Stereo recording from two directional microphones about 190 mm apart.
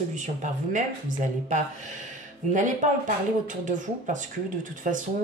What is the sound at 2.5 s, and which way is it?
Speech, 40° right (ahead or behind).